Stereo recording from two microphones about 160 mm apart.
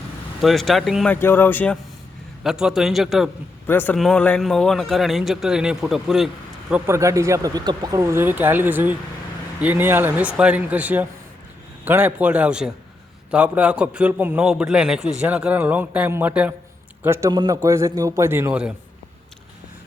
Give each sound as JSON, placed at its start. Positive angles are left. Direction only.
{"t": 0.4, "sound": "a man's voice", "side_deg": 0}
{"t": 1.1, "sound": "speech", "side_deg": 15}
{"t": 2.4, "sound": "a man's voice", "side_deg": -5}
{"t": 3.7, "sound": "a man's voice", "side_deg": 10}